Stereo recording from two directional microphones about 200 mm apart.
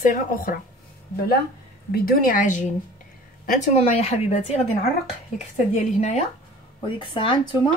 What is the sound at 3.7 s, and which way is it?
Speech, 30° left (ahead or behind).